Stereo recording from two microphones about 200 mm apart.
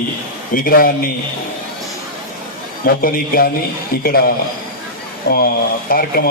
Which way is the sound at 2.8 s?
45° left (ahead or behind).